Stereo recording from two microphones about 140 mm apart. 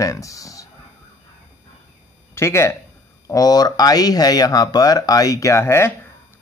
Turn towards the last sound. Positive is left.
turn(degrees=20)  # may be behind; listen again after turning